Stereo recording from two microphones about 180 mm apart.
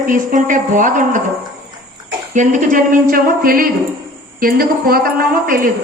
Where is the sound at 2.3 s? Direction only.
45° right (ahead or behind).